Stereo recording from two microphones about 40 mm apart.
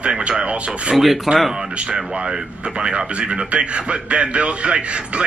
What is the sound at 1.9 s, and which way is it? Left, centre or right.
Speech, right.